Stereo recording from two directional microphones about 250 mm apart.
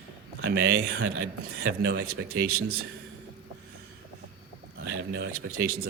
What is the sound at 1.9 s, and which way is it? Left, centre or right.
Speech, right.